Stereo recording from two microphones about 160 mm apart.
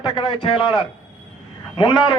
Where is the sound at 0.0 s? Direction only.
30° left (ahead or behind).